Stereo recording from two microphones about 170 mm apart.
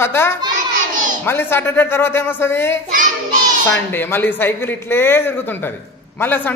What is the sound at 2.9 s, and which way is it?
Child singing, 50° right (ahead or behind).